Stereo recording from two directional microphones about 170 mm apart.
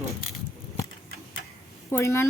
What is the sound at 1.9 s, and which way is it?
Speech, 15° left (ahead or behind).